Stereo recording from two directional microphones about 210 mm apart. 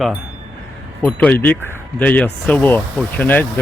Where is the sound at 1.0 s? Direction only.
5° left (ahead or behind).